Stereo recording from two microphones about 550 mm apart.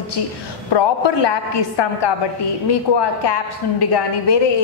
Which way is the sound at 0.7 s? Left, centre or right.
Left.